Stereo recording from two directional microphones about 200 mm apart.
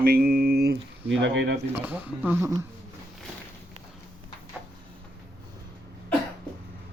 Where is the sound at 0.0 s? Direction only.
50° right (ahead or behind).